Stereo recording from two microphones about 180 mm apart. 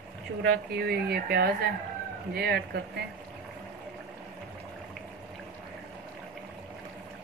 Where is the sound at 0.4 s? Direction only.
60° right (ahead or behind).